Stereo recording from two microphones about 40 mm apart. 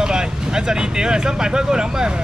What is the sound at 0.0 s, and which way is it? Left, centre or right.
Speech, centre.